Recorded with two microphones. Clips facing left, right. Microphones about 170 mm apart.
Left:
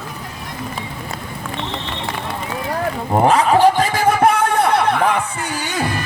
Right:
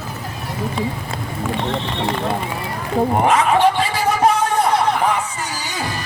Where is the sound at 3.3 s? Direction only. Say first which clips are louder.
Left 5 dB; 35° left (ahead or behind); by 4.8 s 60° left (ahead or behind).